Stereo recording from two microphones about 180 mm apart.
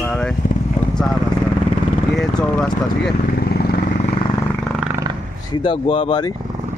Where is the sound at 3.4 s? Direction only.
60° left (ahead or behind).